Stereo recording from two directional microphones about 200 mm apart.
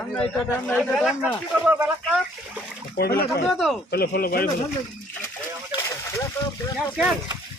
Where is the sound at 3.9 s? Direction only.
50° left (ahead or behind).